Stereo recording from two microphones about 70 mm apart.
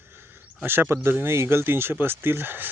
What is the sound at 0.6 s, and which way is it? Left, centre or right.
Speech, right.